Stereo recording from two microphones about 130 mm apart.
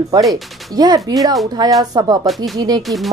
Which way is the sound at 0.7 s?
30° right (ahead or behind).